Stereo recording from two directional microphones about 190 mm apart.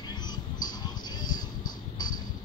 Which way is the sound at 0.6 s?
20° left (ahead or behind).